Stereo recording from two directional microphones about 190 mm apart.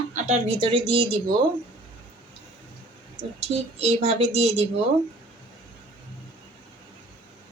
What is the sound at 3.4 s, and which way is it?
A woman's voice, 35° right (ahead or behind).